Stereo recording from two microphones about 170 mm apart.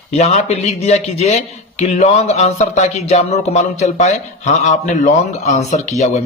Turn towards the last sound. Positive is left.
turn(degrees=45)  # may be behind; listen again after turning